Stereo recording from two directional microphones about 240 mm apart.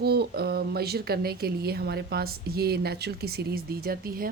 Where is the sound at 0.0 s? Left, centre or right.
Right.